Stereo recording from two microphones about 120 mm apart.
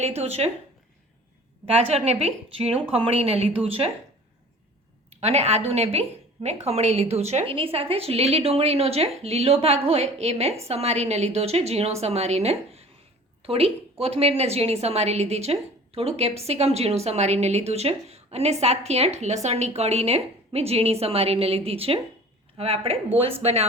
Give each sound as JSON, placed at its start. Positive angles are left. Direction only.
{"t": 0.0, "sound": "a woman's voice", "side_deg": -60}
{"t": 1.6, "sound": "a woman's voice", "side_deg": -55}
{"t": 5.2, "sound": "a woman's voice", "side_deg": -60}